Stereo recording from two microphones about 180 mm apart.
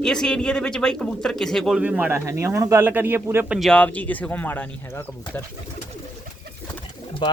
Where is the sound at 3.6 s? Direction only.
5° left (ahead or behind).